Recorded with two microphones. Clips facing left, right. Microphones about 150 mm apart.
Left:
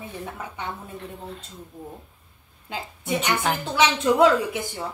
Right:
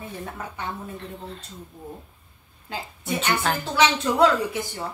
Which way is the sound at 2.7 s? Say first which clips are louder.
Left 2 dB; 15° left (ahead or behind).